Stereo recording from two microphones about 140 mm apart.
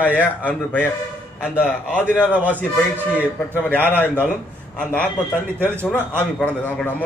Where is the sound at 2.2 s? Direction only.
10° right (ahead or behind).